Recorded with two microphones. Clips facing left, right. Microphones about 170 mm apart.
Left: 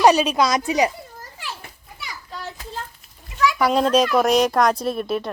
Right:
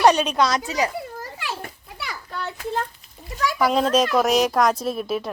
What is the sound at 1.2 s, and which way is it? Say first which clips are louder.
Children playing: right 5 dB; 70° right (ahead or behind).